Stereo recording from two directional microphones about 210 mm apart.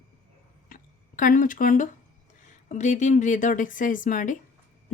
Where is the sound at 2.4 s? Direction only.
35° left (ahead or behind).